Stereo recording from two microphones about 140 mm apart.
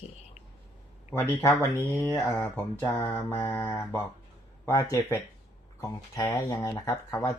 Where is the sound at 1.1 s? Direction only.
20° left (ahead or behind).